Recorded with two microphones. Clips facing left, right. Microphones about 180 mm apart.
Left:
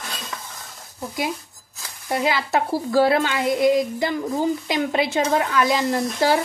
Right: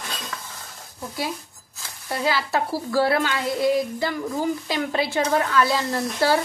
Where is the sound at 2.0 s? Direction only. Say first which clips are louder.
Left 2 dB; 20° left (ahead or behind).